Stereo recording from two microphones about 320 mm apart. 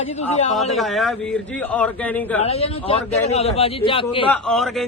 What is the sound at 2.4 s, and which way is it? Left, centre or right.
A man's voice, centre.